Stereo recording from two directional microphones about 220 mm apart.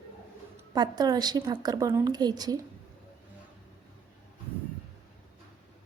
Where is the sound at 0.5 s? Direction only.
20° right (ahead or behind).